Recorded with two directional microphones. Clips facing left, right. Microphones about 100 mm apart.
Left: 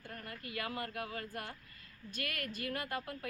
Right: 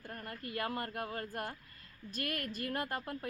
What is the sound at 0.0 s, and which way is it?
A woman's voice, 40° right (ahead or behind).